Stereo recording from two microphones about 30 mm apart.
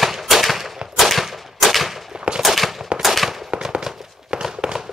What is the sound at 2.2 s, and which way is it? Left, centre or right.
Gunshot, right.